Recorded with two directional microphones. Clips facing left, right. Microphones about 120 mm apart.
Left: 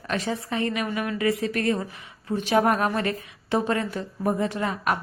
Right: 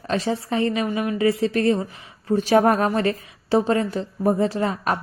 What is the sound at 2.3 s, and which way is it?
A woman's voice, 35° right (ahead or behind).